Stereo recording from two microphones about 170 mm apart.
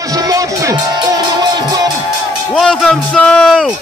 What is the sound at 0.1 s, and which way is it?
Music, 20° right (ahead or behind).